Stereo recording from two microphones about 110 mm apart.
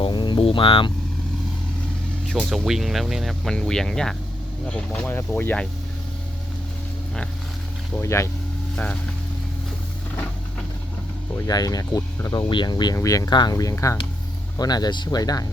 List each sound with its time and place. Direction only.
0.0 s speech: 45° left (ahead or behind)
2.4 s speech: 5° right (ahead or behind)
4.9 s speech: 15° left (ahead or behind)
7.9 s speech: 25° left (ahead or behind)
8.7 s speech: 10° left (ahead or behind)
11.3 s speech: 35° left (ahead or behind)
14.6 s speech: 35° left (ahead or behind)